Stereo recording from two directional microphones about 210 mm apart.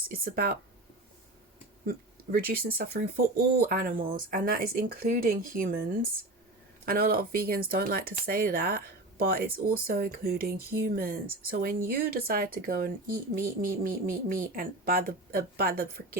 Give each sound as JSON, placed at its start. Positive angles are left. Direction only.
{"t": 0.1, "sound": "speech", "side_deg": -45}
{"t": 1.9, "sound": "speech", "side_deg": -45}